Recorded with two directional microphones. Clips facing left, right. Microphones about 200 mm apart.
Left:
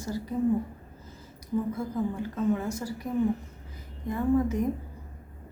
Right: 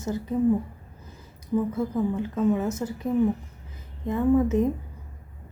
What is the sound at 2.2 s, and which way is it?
Speech, 20° right (ahead or behind).